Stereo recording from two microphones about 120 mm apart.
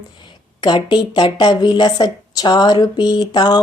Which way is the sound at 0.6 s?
40° left (ahead or behind).